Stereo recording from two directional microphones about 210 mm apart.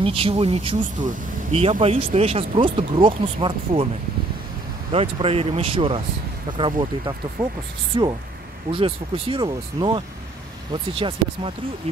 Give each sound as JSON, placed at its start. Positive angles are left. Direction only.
{"t": 0.0, "sound": "speech", "side_deg": -25}
{"t": 4.9, "sound": "speech", "side_deg": -25}